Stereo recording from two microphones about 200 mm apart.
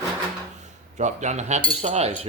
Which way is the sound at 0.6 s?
35° right (ahead or behind).